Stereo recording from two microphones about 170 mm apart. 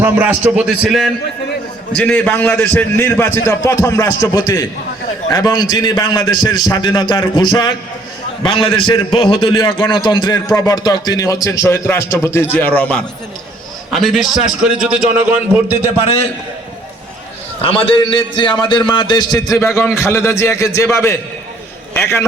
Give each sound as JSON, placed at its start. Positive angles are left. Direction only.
{"t": 0.0, "sound": "a man's voice", "side_deg": -10}
{"t": 17.6, "sound": "a man's voice", "side_deg": 30}